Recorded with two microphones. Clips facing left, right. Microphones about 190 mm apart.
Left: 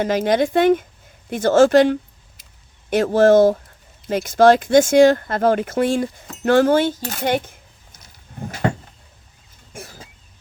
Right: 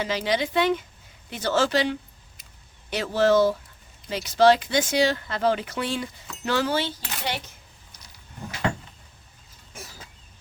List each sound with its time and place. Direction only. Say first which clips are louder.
0.0 s speech: left 8 dB; 50° left (ahead or behind)
7.9 s a sound: left 7 dB; 45° left (ahead or behind)
9.7 s cough: left 6 dB; 50° left (ahead or behind)